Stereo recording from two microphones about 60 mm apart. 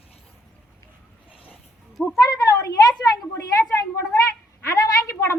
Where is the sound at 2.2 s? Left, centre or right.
Left.